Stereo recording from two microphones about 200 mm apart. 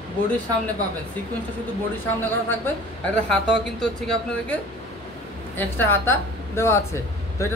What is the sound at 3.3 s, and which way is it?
A woman's voice, 5° left (ahead or behind).